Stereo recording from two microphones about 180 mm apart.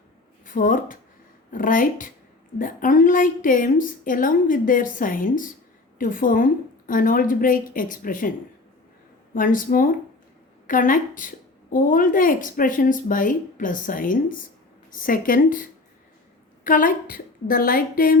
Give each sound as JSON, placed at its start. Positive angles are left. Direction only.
{"t": 0.4, "sound": "a woman's voice", "side_deg": 45}
{"t": 9.3, "sound": "a woman's voice", "side_deg": 50}
{"t": 16.6, "sound": "a woman's voice", "side_deg": 50}